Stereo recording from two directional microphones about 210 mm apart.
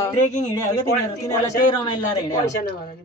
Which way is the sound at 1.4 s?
20° left (ahead or behind).